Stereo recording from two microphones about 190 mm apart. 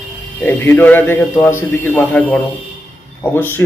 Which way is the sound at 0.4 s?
10° left (ahead or behind).